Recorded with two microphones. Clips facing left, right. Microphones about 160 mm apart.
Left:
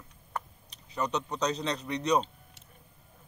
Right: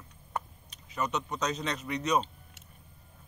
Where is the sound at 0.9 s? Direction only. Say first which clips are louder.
Left 1 dB; 35° left (ahead or behind).